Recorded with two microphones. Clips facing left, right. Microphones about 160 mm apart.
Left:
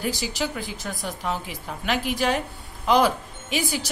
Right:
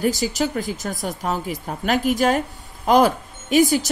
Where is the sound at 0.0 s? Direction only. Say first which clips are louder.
Right 6 dB; 40° right (ahead or behind).